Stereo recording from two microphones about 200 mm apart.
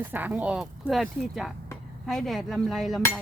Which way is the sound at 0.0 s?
10° right (ahead or behind).